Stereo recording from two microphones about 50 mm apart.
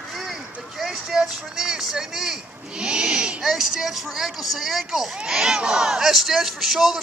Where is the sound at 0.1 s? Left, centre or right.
Centre.